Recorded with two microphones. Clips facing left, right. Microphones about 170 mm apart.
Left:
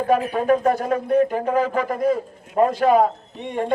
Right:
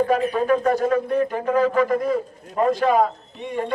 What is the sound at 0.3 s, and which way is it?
Speech, 50° left (ahead or behind).